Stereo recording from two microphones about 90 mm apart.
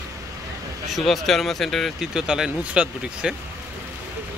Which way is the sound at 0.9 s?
Centre (ahead or behind).